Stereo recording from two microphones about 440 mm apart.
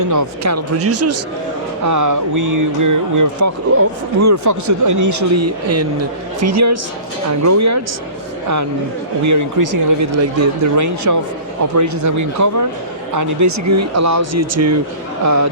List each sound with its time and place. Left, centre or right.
0.0 s speech: right
9.2 s speech: right